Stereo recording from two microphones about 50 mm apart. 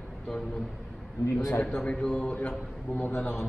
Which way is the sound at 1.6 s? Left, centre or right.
Left.